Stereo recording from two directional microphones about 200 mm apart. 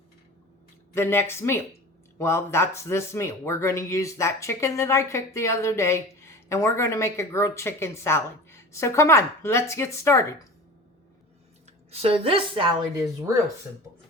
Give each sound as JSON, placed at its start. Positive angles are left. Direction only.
{"t": 0.9, "sound": "speech", "side_deg": 10}
{"t": 11.9, "sound": "a woman's voice", "side_deg": -30}